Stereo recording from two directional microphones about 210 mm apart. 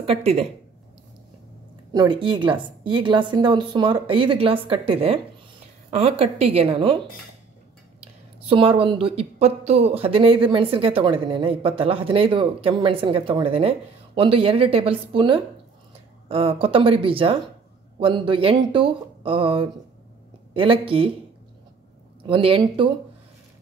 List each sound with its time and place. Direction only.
0.0 s speech: 30° right (ahead or behind)
2.0 s speech: 25° right (ahead or behind)
8.0 s speech: 25° right (ahead or behind)
22.2 s speech: 25° right (ahead or behind)